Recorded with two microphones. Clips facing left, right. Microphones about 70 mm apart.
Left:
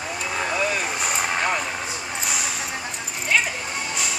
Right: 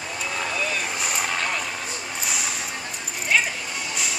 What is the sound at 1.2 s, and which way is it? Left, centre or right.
Vehicle, left.